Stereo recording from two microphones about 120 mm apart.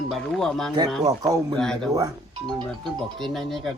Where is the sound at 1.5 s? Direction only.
5° left (ahead or behind).